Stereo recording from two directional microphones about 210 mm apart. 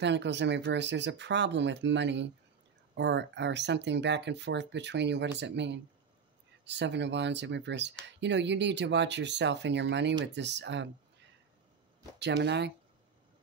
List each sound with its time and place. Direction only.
0.0 s speech: 55° right (ahead or behind)
12.2 s speech: 55° right (ahead or behind)